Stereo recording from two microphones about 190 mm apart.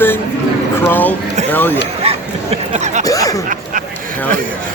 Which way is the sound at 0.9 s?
10° left (ahead or behind).